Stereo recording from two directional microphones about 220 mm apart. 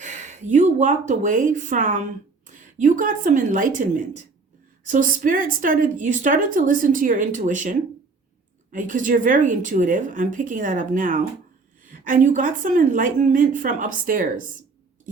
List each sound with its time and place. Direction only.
0.0 s speech: 30° right (ahead or behind)